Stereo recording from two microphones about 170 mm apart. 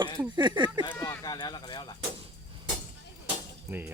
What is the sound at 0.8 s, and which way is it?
Speech, 20° left (ahead or behind).